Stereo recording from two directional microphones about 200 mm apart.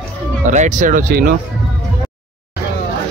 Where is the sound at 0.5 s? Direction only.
40° right (ahead or behind).